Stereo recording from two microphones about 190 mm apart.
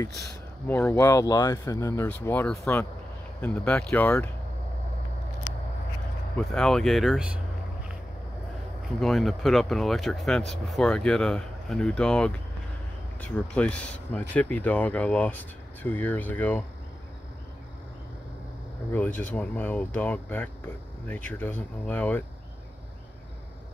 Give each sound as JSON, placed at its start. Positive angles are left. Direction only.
{"t": 0.0, "sound": "speech", "side_deg": 15}
{"t": 5.5, "sound": "a sound", "side_deg": 20}
{"t": 6.3, "sound": "speech", "side_deg": 5}
{"t": 9.0, "sound": "speech", "side_deg": 0}
{"t": 18.9, "sound": "speech", "side_deg": 10}